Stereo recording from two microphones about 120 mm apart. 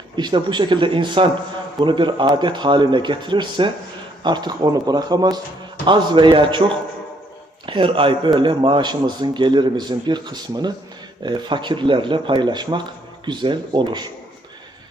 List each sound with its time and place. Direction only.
0.2 s a man's voice: 40° right (ahead or behind)
7.7 s a man's voice: 45° right (ahead or behind)